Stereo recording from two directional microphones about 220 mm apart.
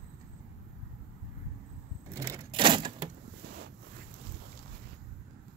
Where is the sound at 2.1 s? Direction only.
10° right (ahead or behind).